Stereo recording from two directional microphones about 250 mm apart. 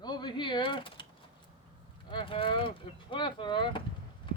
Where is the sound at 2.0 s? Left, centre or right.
Centre.